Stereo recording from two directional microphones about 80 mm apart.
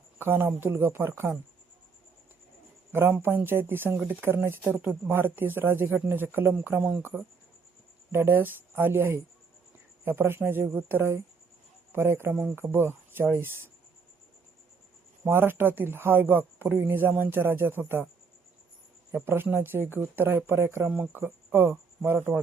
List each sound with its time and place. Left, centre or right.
0.2 s speech: right
2.9 s speech: right
15.2 s speech: right
19.1 s speech: right
20.8 s speech: centre